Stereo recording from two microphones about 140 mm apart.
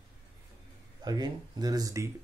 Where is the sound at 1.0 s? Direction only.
30° right (ahead or behind).